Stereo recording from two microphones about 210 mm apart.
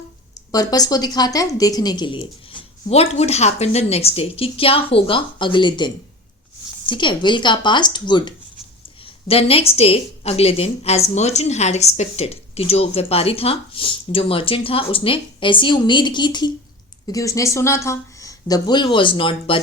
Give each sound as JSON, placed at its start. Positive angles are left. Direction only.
{"t": 0.5, "sound": "a woman's voice", "side_deg": 20}